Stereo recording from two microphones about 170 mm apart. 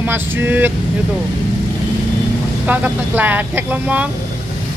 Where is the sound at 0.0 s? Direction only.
10° right (ahead or behind).